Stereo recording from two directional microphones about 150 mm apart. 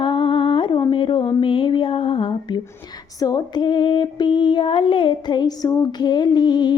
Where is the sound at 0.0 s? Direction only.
35° left (ahead or behind).